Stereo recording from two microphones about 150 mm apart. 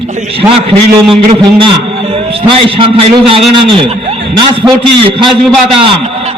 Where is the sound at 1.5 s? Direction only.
40° right (ahead or behind).